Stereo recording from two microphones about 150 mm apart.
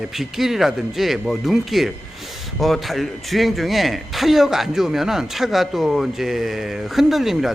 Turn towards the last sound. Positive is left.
turn(degrees=0)  # may be behind; listen again after turning